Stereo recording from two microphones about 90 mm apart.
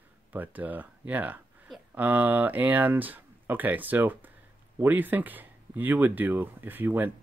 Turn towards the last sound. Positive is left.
turn(degrees=-20)  # may be behind; listen again after turning